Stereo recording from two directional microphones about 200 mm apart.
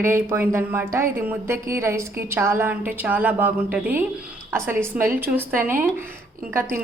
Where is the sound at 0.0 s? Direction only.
10° right (ahead or behind).